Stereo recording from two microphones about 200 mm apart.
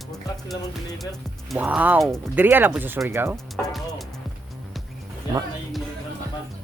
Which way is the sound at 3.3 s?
Centre (ahead or behind).